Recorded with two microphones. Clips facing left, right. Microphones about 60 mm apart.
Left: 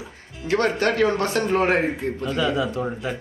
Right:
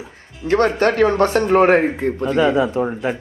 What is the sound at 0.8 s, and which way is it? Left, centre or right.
Speech, right.